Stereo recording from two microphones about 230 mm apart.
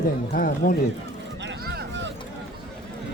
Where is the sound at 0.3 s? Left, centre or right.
Left.